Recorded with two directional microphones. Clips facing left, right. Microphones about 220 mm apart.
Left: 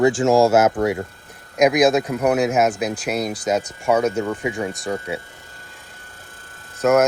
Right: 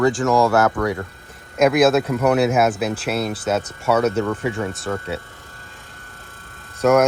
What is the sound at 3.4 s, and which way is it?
Speech, 15° left (ahead or behind).